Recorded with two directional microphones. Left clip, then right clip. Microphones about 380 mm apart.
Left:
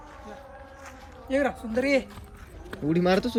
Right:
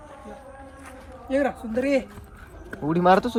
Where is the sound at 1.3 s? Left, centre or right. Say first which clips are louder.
Right 2 dB; centre.